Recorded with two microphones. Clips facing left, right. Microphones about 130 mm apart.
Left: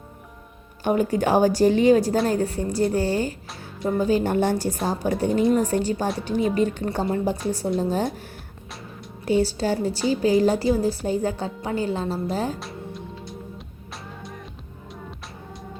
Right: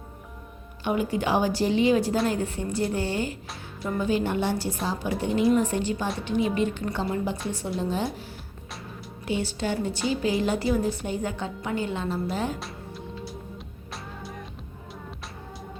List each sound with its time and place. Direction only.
0.9 s a woman's voice: 45° left (ahead or behind)
9.2 s speech: 40° left (ahead or behind)